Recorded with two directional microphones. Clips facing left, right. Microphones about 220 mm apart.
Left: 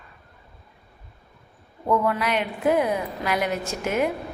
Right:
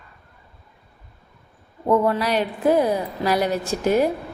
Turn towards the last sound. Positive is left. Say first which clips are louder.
# right 5 dB
turn(degrees=-35)  # may be behind; listen again after turning